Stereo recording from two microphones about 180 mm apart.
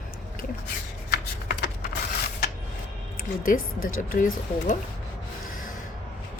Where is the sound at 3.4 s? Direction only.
50° left (ahead or behind).